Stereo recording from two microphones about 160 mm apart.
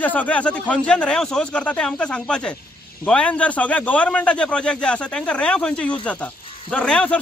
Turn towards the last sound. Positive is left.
turn(degrees=5)  # may be behind; listen again after turning